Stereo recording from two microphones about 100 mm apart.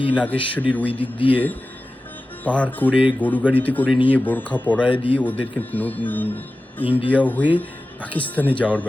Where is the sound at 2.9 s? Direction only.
15° right (ahead or behind).